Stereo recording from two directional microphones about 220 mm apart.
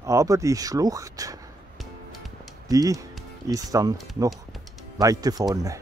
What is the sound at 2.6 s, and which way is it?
Speech, 15° right (ahead or behind).